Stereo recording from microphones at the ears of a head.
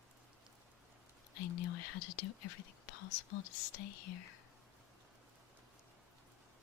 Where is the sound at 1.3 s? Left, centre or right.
Left.